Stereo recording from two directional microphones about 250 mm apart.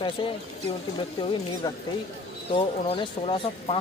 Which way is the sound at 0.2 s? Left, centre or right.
Centre.